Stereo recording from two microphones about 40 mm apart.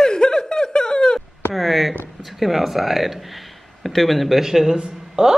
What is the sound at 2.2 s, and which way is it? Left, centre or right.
A man's voice, centre.